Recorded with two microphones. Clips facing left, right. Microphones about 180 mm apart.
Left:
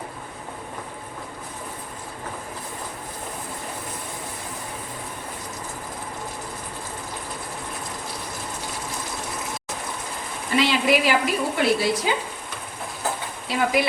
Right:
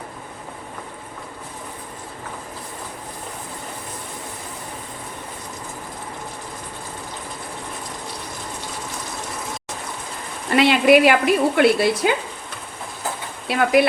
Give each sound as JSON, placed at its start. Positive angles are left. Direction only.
{"t": 10.5, "sound": "speech", "side_deg": -65}
{"t": 13.5, "sound": "speech", "side_deg": -60}